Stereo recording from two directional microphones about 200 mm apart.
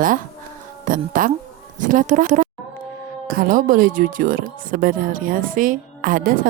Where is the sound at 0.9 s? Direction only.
45° right (ahead or behind).